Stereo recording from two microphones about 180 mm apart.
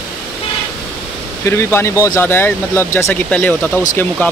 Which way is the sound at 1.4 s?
15° left (ahead or behind).